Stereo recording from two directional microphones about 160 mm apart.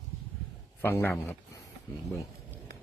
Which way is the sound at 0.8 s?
15° left (ahead or behind).